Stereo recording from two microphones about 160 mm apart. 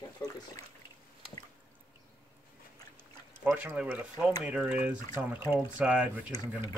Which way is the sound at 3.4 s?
10° right (ahead or behind).